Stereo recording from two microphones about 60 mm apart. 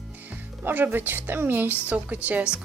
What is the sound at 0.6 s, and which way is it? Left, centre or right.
A woman's voice, right.